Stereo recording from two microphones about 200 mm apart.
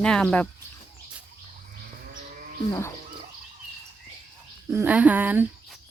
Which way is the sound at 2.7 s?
15° left (ahead or behind).